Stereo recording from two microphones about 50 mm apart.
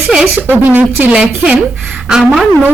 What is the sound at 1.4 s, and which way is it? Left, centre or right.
Speech, right.